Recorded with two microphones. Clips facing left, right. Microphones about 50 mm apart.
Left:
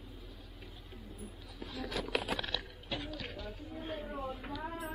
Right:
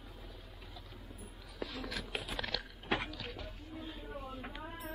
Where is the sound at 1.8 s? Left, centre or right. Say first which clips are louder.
Left 6 dB; left.